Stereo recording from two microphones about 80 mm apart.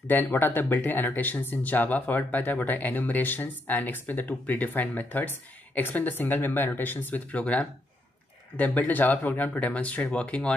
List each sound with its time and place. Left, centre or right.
0.0 s speech: left